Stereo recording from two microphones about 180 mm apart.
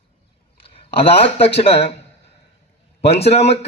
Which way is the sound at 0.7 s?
35° left (ahead or behind).